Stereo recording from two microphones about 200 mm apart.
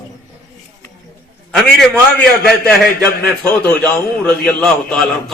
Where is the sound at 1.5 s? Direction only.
Centre (ahead or behind).